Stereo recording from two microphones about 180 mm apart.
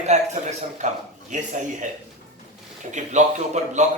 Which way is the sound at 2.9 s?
40° right (ahead or behind).